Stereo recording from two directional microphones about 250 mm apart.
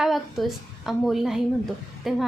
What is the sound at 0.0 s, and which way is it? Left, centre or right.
A woman's voice, centre.